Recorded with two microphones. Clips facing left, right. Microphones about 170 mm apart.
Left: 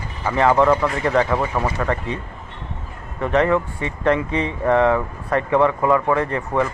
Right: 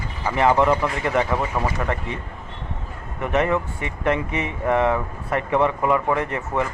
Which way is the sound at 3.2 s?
15° right (ahead or behind).